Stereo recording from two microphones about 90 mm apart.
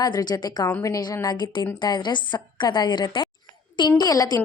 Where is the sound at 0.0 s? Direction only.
50° left (ahead or behind).